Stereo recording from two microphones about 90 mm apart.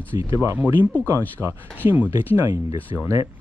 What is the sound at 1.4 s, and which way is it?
Speech, 5° left (ahead or behind).